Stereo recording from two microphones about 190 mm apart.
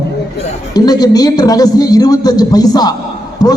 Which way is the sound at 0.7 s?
20° left (ahead or behind).